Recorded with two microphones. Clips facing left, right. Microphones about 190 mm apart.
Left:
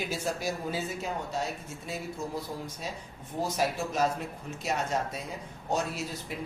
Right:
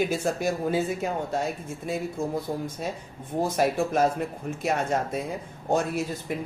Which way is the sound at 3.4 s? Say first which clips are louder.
Right 6 dB; 55° right (ahead or behind).